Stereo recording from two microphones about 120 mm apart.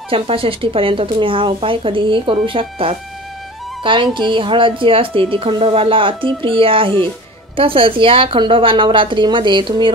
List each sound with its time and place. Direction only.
0.1 s a woman's voice: 50° right (ahead or behind)